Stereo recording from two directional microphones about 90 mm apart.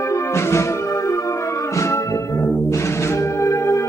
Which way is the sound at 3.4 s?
30° left (ahead or behind).